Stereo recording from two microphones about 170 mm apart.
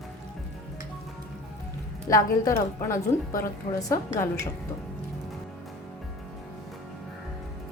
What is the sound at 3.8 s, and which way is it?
Dishes, 20° left (ahead or behind).